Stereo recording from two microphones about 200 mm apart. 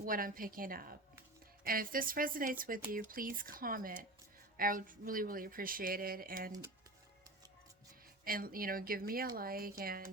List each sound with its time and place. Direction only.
0.0 s speech: 45° right (ahead or behind)
8.2 s speech: 45° right (ahead or behind)